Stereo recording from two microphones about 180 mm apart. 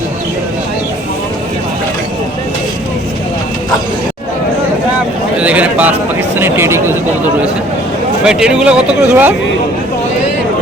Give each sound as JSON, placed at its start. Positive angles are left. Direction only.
{"t": 5.4, "sound": "a sound", "side_deg": -5}
{"t": 6.4, "sound": "speech", "side_deg": -15}
{"t": 8.2, "sound": "speech", "side_deg": -5}